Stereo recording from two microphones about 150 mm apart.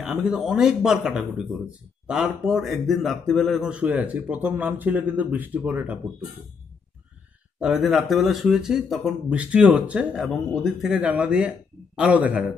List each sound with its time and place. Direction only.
0.0 s speech: 5° right (ahead or behind)
7.6 s speech: centre (ahead or behind)
10.3 s speech: 5° left (ahead or behind)